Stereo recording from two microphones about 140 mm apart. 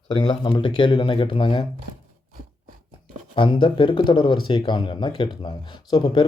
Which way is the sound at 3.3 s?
35° left (ahead or behind).